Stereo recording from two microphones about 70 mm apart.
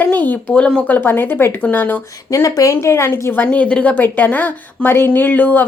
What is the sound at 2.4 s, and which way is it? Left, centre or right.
Speech, left.